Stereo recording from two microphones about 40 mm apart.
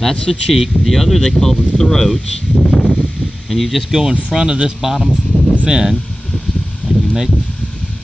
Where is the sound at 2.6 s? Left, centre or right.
Centre.